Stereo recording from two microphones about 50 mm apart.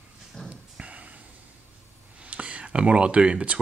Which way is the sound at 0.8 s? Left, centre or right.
Right.